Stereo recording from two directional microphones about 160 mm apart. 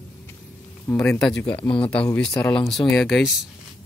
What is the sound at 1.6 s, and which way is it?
Speech, 30° left (ahead or behind).